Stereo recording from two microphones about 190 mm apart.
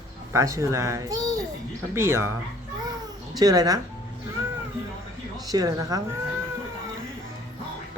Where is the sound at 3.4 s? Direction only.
20° right (ahead or behind).